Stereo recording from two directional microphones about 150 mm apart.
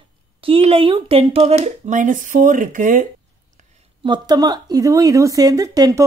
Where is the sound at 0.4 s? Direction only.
40° right (ahead or behind); by 3.1 s 65° right (ahead or behind).